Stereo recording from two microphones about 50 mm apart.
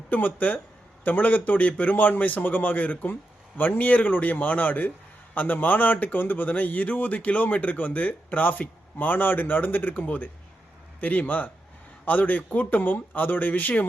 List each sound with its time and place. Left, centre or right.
0.1 s speech: left